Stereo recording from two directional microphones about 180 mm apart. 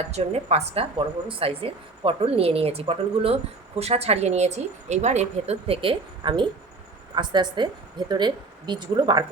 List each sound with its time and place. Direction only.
0.1 s a woman's voice: 35° right (ahead or behind)